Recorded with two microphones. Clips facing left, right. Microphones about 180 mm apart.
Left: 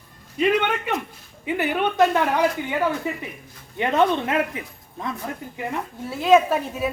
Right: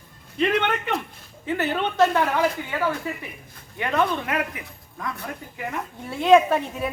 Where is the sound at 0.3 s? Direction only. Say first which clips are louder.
Left 2 dB; 10° left (ahead or behind).